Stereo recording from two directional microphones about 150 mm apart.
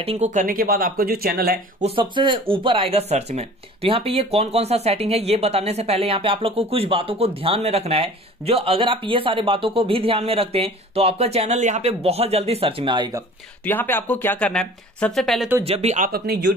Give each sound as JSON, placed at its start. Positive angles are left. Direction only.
{"t": 0.0, "sound": "speech", "side_deg": -40}
{"t": 0.3, "sound": "speech", "side_deg": -65}
{"t": 2.0, "sound": "speech", "side_deg": -35}
{"t": 13.7, "sound": "speech", "side_deg": 15}
{"t": 15.6, "sound": "speech", "side_deg": -45}